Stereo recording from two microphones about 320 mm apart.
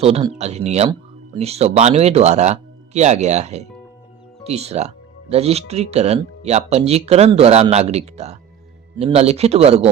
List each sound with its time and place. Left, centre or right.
0.0 s speech: centre